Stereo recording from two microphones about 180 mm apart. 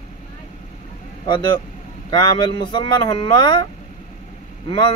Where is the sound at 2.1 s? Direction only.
25° left (ahead or behind).